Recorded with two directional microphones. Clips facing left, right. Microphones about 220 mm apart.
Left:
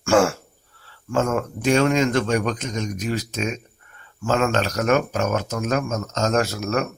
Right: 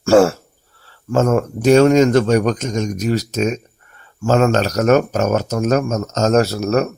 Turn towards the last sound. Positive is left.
turn(degrees=-40)  # may be behind; listen again after turning